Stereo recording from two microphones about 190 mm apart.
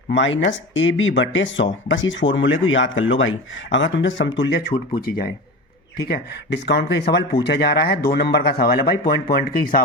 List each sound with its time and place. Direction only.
0.1 s speech: 75° left (ahead or behind)
4.9 s speech: 50° left (ahead or behind)
6.1 s speech: 65° left (ahead or behind); by 9.8 s 50° left (ahead or behind)